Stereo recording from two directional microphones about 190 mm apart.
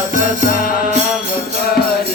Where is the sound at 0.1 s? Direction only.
45° left (ahead or behind).